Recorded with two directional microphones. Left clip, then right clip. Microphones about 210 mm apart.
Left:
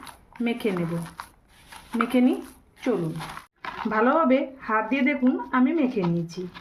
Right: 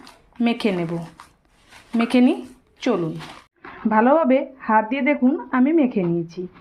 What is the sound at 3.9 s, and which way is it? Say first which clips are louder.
Speech: right 5 dB; 20° right (ahead or behind).